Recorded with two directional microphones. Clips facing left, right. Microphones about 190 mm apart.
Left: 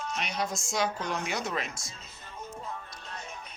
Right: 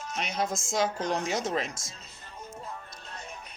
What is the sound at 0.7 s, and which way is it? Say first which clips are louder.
Speech: right 3 dB; 40° right (ahead or behind).